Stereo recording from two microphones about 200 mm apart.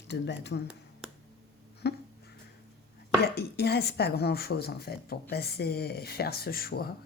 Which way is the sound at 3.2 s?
55° left (ahead or behind).